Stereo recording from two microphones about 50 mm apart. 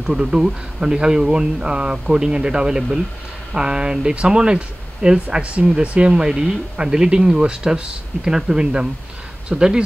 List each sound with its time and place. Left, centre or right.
0.0 s speech: centre